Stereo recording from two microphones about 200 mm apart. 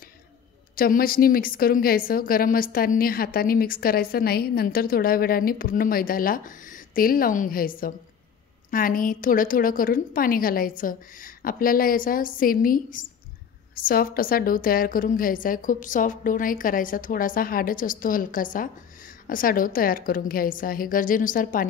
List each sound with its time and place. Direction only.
0.7 s a woman's voice: 45° left (ahead or behind)